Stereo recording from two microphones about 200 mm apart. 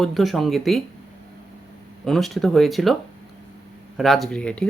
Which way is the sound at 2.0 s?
Centre (ahead or behind).